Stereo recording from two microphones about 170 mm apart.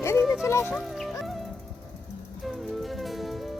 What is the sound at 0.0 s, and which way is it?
Music, 15° left (ahead or behind).